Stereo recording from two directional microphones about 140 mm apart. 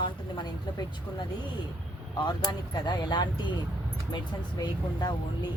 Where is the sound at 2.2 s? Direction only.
30° left (ahead or behind).